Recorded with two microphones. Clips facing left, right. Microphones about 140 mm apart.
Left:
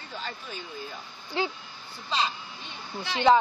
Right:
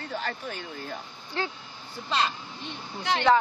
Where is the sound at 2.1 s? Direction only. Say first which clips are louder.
Right 2 dB; 60° right (ahead or behind).